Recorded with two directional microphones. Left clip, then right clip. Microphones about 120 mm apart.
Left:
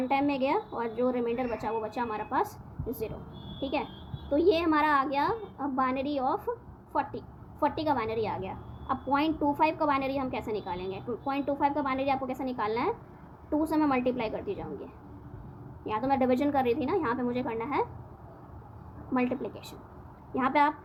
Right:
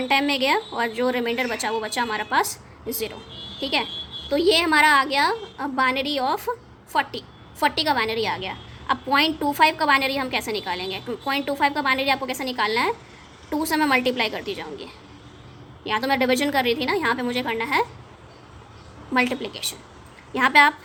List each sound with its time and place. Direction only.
0.1 s a woman's voice: 40° right (ahead or behind)
19.1 s a woman's voice: 40° right (ahead or behind)